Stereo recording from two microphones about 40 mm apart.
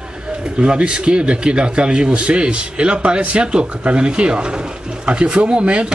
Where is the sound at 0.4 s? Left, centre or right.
Right.